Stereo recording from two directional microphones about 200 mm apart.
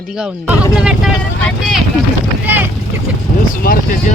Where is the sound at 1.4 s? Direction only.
Centre (ahead or behind).